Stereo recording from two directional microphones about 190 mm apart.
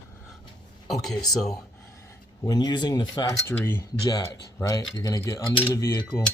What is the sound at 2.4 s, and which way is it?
Speech, 20° left (ahead or behind).